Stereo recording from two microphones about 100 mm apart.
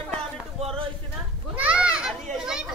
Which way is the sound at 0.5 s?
70° right (ahead or behind).